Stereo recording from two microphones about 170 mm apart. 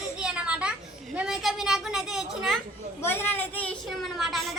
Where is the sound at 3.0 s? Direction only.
10° left (ahead or behind).